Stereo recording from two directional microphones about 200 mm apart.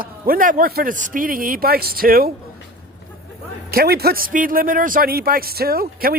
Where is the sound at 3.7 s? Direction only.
50° right (ahead or behind).